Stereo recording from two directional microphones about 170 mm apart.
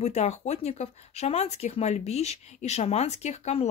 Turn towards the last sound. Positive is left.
turn(degrees=40)  # may be behind; listen again after turning